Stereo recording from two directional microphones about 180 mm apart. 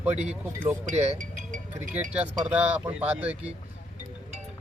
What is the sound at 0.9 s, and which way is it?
Speech, 40° right (ahead or behind).